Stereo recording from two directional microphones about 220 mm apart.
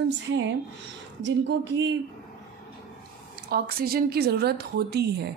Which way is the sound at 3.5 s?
45° right (ahead or behind).